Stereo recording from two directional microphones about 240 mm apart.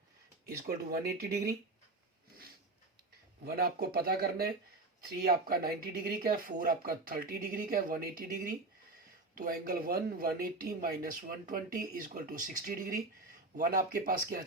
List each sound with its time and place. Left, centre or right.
0.4 s speech: right
3.4 s speech: right
9.3 s speech: right